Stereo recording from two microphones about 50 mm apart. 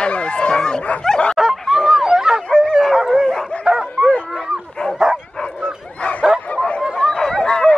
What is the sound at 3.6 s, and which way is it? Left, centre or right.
Dog, centre.